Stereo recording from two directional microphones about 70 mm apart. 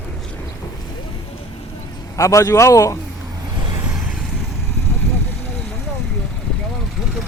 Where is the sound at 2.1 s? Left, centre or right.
Left.